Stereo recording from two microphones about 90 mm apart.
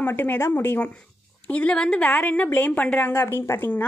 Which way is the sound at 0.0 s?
20° left (ahead or behind).